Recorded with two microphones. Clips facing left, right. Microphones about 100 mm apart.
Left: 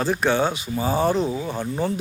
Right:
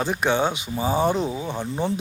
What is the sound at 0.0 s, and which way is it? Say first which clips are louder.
A man's voice: left 1 dB; 15° right (ahead or behind).